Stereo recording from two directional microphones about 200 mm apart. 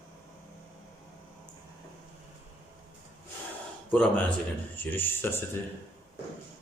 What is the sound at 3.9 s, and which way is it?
Speech, 5° left (ahead or behind).